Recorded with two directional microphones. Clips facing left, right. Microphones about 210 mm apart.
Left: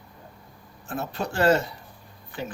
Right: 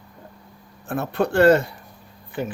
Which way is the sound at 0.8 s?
55° right (ahead or behind).